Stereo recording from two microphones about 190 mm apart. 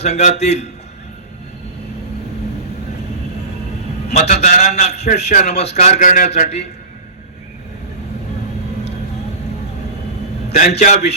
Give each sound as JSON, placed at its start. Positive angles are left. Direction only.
{"t": 0.0, "sound": "a man's voice", "side_deg": 40}
{"t": 4.1, "sound": "a man's voice", "side_deg": 35}
{"t": 10.5, "sound": "a man's voice", "side_deg": 40}